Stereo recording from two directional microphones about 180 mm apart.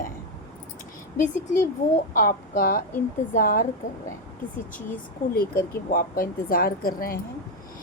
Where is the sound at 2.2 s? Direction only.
55° left (ahead or behind).